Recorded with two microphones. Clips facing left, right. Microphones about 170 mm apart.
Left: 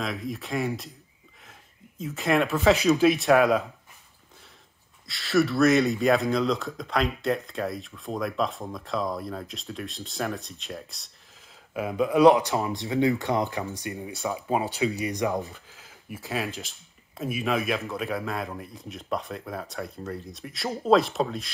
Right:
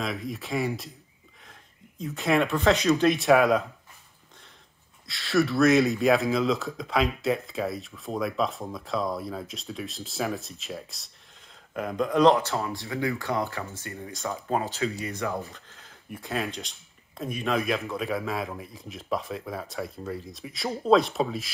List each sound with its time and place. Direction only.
0.0 s speech: centre (ahead or behind)
5.0 s speech: centre (ahead or behind); by 15.6 s 15° left (ahead or behind)
15.7 s speech: 5° left (ahead or behind)